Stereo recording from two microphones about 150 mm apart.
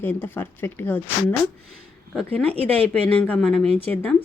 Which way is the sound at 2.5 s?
40° right (ahead or behind).